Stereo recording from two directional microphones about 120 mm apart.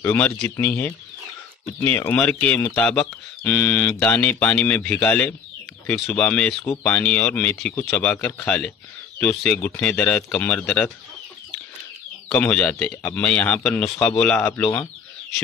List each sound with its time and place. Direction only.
0.0 s speech: 20° left (ahead or behind)
12.3 s speech: 5° left (ahead or behind)